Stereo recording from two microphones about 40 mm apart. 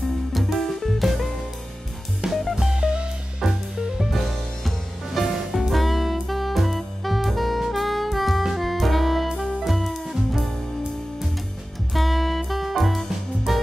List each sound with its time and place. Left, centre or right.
0.3 s music: centre
2.2 s music: right
4.1 s music: centre
11.9 s music: centre